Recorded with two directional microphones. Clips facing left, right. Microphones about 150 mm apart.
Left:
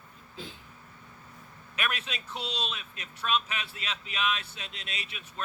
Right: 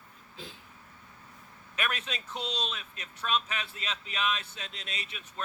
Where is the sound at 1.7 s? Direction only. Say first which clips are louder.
Even; 40° right (ahead or behind).